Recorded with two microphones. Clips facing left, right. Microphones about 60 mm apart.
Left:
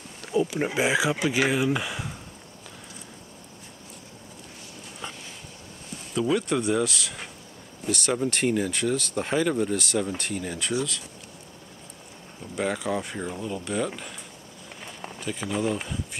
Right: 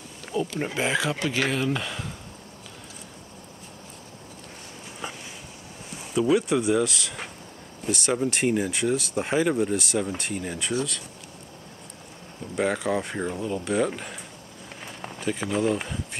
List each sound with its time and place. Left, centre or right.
0.3 s speech: centre
5.0 s a sound: centre
6.1 s speech: centre
12.5 s speech: centre
14.9 s run: centre